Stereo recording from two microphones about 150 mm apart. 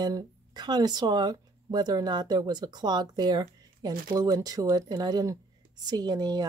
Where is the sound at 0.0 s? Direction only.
30° right (ahead or behind).